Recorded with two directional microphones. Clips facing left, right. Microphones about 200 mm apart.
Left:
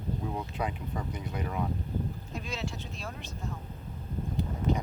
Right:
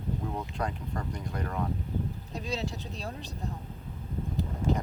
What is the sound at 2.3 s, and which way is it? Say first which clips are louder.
Speech: right 4 dB; 35° right (ahead or behind).